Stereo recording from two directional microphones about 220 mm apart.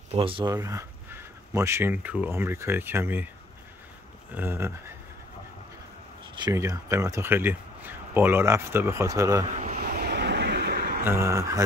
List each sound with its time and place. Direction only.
0.1 s speech: 25° right (ahead or behind)
4.4 s speech: 10° right (ahead or behind)
6.3 s speech: 15° right (ahead or behind)
9.6 s vehicle: 40° right (ahead or behind)
11.1 s speech: 15° right (ahead or behind)